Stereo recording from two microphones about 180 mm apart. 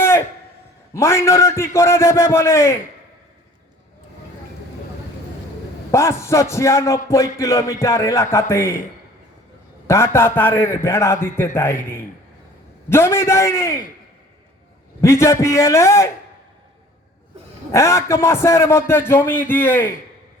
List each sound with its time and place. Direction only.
0.9 s a man's voice: 15° left (ahead or behind)
5.9 s a man's voice: 15° left (ahead or behind)
9.8 s a man's voice: 15° left (ahead or behind)
12.9 s a man's voice: 15° left (ahead or behind)
15.0 s a man's voice: 15° left (ahead or behind)
17.7 s a man's voice: 15° left (ahead or behind)